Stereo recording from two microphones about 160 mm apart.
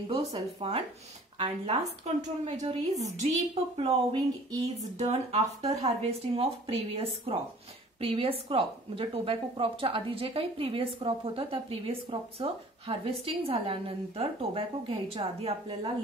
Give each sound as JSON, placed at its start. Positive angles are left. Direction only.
{"t": 0.1, "sound": "a woman's voice", "side_deg": -35}
{"t": 3.7, "sound": "speech", "side_deg": -30}
{"t": 4.9, "sound": "speech", "side_deg": -40}